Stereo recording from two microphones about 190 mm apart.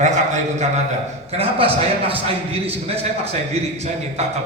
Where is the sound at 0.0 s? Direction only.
35° right (ahead or behind).